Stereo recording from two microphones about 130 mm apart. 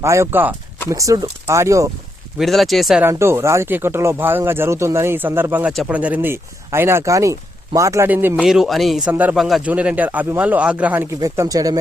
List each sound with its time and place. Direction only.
0.0 s speech: 20° right (ahead or behind)
2.4 s speech: centre (ahead or behind)
3.0 s speech: 20° right (ahead or behind)
8.4 s a man's voice: centre (ahead or behind)
11.2 s speech: 30° right (ahead or behind)